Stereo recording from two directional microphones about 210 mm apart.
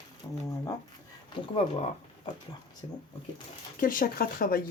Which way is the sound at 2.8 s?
25° left (ahead or behind).